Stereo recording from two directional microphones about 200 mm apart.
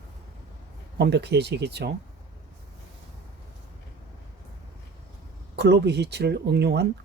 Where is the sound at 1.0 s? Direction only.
60° right (ahead or behind).